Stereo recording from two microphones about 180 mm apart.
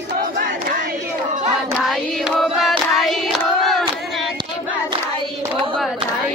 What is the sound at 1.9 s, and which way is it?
Choir, centre (ahead or behind).